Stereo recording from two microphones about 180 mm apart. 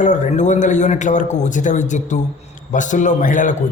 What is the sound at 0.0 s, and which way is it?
A man's voice, 40° left (ahead or behind).